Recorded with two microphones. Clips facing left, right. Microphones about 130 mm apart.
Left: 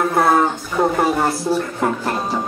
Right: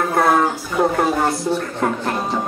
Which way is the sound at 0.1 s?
Centre (ahead or behind).